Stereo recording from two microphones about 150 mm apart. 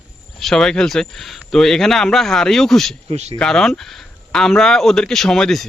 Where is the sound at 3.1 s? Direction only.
45° right (ahead or behind).